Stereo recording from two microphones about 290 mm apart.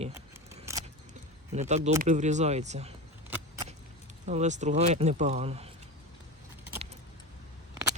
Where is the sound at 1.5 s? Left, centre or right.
Right.